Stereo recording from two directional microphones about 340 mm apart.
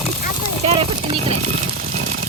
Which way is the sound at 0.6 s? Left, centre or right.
Centre.